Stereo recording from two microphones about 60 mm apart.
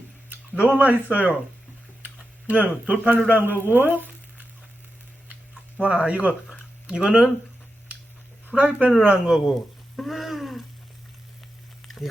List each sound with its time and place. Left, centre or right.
0.3 s a sound: right
1.1 s speech: right
2.5 s speech: right
5.8 s speech: right
8.5 s speech: right
9.0 s speech: centre
9.9 s frying: centre